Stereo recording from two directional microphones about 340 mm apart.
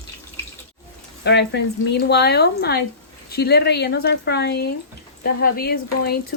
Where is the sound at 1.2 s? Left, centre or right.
Left.